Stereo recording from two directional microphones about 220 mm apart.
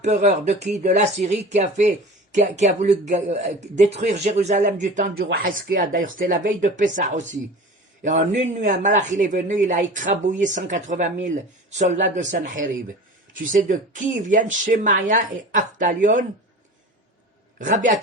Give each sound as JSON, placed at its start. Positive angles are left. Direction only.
{"t": 0.0, "sound": "a man's voice", "side_deg": -30}
{"t": 17.6, "sound": "a man's voice", "side_deg": -35}